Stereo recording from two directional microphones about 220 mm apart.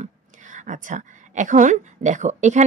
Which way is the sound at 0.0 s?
35° right (ahead or behind).